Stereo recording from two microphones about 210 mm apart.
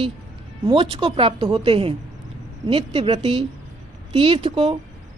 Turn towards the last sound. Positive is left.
turn(degrees=-25)  # may be behind; listen again after turning